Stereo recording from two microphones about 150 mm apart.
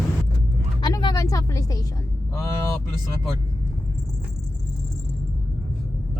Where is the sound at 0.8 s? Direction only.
30° left (ahead or behind).